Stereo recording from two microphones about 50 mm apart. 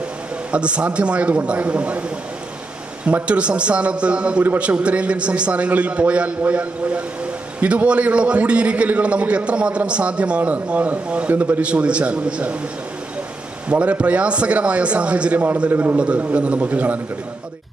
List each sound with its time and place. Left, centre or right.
0.5 s a man's voice: right
3.2 s a man's voice: right
11.7 s a man's voice: right
13.7 s a man's voice: right
15.7 s a man's voice: right
16.0 s a man's voice: right